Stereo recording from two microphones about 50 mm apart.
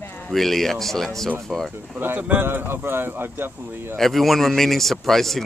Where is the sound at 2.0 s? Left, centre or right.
Right.